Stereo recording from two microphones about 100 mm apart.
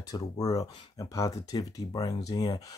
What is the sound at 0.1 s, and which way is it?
Speech, 35° left (ahead or behind).